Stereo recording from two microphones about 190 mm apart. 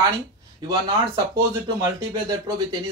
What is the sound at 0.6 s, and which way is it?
Speech, 20° right (ahead or behind).